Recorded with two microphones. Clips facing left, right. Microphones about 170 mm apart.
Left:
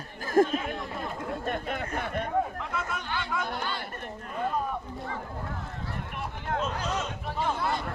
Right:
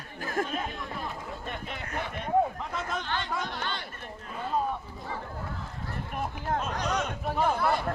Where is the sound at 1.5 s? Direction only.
50° left (ahead or behind).